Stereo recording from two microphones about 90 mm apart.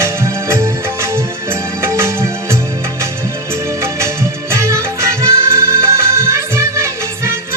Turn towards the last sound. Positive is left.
turn(degrees=-30)  # may be behind; listen again after turning